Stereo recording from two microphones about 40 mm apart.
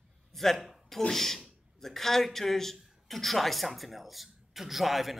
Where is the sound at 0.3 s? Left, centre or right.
Centre.